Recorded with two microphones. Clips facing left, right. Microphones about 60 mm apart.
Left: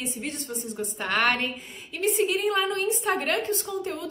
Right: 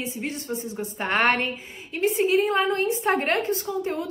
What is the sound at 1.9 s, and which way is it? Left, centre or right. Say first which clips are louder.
Speech: right 4 dB; centre.